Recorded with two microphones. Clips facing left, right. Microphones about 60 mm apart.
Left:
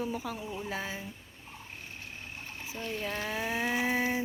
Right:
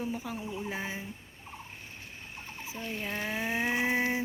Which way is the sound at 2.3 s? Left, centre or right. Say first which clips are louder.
Right 1 dB; right.